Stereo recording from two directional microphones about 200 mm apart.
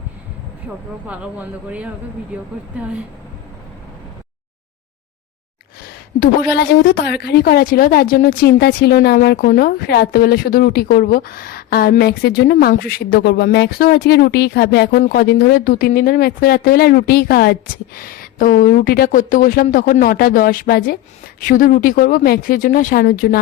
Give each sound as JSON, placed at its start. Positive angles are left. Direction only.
{"t": 1.0, "sound": "speech", "side_deg": -5}
{"t": 6.1, "sound": "a woman's voice", "side_deg": 50}